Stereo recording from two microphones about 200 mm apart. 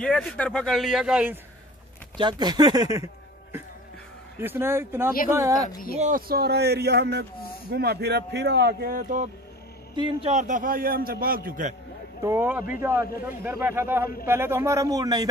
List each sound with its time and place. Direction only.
0.0 s a man's voice: 5° left (ahead or behind)
2.1 s speech: 20° right (ahead or behind)
4.4 s speech: 10° right (ahead or behind)
5.9 s speech: 40° right (ahead or behind)
9.9 s speech: 25° right (ahead or behind)
10.3 s a man's voice: 40° right (ahead or behind)
12.2 s speech: 10° right (ahead or behind)